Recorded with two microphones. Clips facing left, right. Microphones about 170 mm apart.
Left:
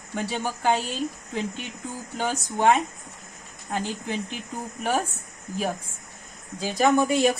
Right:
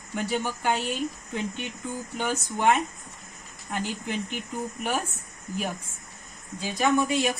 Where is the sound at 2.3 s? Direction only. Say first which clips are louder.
Left 2 dB; 35° left (ahead or behind).